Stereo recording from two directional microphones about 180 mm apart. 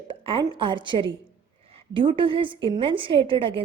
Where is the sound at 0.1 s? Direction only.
30° right (ahead or behind).